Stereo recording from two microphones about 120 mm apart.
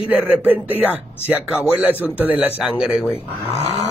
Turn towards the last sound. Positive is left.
turn(degrees=-5)  # may be behind; listen again after turning